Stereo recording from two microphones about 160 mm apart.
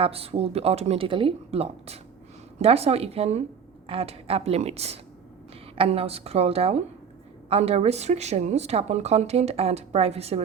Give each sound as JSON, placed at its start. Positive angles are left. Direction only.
{"t": 0.0, "sound": "speech", "side_deg": -40}